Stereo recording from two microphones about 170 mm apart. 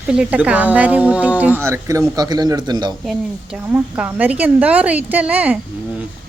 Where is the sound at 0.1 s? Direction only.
5° right (ahead or behind); by 2.9 s 25° right (ahead or behind).